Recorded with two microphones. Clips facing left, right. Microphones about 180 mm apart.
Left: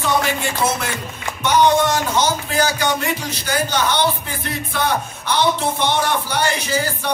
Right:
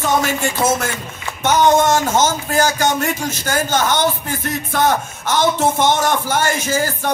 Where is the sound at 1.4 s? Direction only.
45° right (ahead or behind).